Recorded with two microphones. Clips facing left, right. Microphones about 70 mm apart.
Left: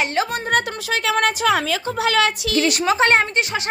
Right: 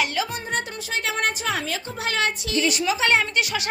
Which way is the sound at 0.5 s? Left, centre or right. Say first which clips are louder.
Left 7 dB; left.